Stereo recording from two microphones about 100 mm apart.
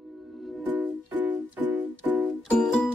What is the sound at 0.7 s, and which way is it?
Music, 15° right (ahead or behind).